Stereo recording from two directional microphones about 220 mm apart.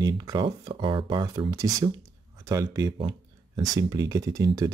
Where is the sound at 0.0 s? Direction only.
20° right (ahead or behind).